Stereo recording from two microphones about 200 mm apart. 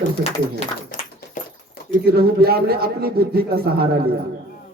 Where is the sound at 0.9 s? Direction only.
40° left (ahead or behind).